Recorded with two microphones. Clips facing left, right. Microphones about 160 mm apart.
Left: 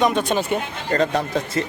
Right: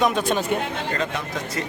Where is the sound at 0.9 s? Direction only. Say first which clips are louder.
Left 7 dB; 35° left (ahead or behind).